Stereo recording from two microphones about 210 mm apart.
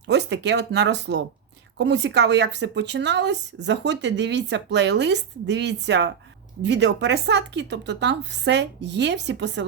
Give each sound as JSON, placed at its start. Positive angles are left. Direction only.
{"t": 0.1, "sound": "speech", "side_deg": -55}